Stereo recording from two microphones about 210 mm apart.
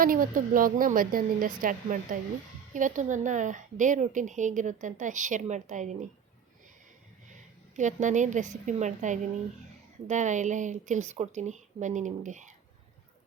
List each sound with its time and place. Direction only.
0.0 s a woman's voice: 40° right (ahead or behind)
7.8 s a woman's voice: 35° right (ahead or behind)